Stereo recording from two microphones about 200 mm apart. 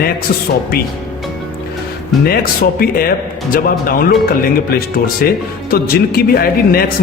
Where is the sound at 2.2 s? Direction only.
50° left (ahead or behind).